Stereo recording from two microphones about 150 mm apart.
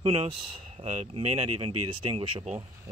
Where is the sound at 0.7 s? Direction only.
45° right (ahead or behind).